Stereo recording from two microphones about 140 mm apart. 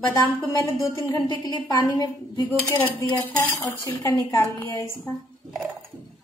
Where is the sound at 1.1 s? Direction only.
25° left (ahead or behind).